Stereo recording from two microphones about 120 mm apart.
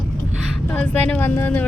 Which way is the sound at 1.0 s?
15° left (ahead or behind).